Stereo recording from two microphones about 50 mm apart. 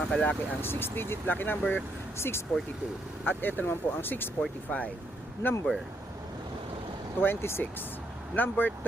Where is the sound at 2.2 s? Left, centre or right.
Left.